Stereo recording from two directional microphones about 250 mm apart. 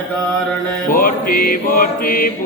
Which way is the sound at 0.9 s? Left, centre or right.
Left.